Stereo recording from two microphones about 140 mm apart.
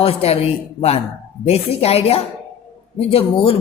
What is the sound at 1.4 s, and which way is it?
A woman's voice, 45° left (ahead or behind).